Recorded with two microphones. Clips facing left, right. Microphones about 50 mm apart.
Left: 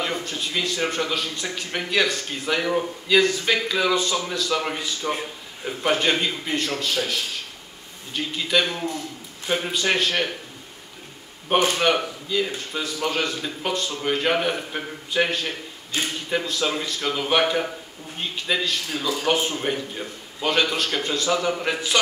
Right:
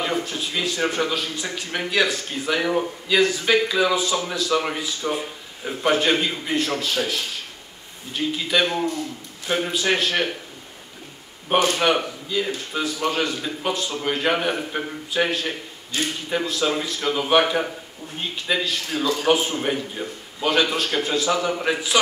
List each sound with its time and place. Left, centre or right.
0.0 s speech: centre
8.6 s a man's voice: right
9.5 s speech: centre
11.8 s a man's voice: centre